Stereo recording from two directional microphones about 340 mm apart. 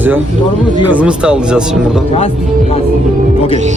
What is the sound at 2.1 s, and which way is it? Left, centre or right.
Speech, centre.